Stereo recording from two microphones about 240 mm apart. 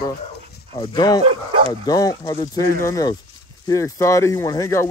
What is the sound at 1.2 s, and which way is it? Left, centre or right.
Speech, right.